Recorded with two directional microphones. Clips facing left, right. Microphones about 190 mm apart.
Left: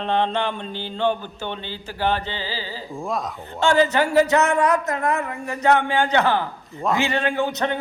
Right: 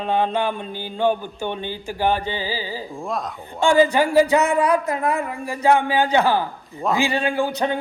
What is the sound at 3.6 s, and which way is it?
Speech, 10° right (ahead or behind).